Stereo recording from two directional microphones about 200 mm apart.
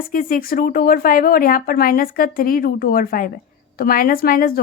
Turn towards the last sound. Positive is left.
turn(degrees=45)  # may be behind; listen again after turning